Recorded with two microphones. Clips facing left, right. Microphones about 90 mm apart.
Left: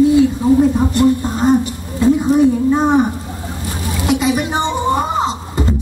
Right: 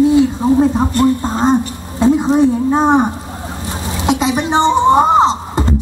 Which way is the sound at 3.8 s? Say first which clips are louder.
Even; 25° right (ahead or behind).